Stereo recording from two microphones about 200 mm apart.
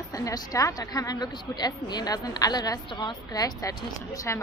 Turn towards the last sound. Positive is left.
turn(degrees=10)  # may be behind; listen again after turning